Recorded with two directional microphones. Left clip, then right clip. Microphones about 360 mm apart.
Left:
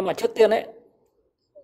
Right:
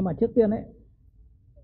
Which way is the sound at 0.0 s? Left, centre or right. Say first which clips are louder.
Left 4 dB; centre.